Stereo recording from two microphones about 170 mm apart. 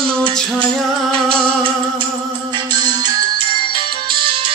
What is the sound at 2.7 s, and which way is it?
Music, 25° right (ahead or behind).